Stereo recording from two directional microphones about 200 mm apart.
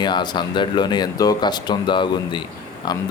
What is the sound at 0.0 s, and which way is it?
Speech, 20° left (ahead or behind).